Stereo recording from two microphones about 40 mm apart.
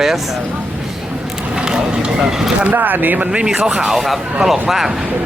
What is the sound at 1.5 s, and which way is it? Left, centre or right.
Vehicle, centre.